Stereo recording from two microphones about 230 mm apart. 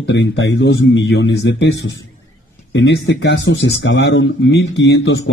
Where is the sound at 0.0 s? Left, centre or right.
Left.